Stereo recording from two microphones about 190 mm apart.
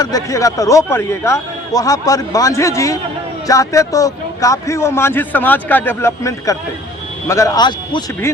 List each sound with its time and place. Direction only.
0.0 s a man's voice: 15° left (ahead or behind)